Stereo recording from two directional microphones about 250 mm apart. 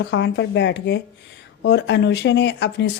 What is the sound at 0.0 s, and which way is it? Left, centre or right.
Speech, left.